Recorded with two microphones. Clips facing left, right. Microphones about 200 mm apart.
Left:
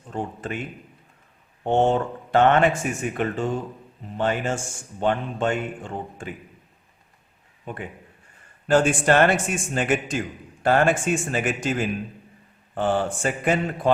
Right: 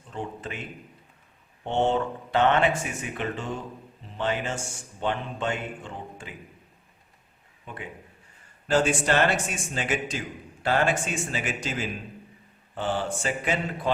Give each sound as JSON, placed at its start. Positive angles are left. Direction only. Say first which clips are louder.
{"t": 0.1, "sound": "a man's voice", "louder": "left 5 dB", "side_deg": 50}
{"t": 1.6, "sound": "a man's voice", "louder": "left 4 dB", "side_deg": 50}
{"t": 8.6, "sound": "a man's voice", "louder": "left 4 dB", "side_deg": 50}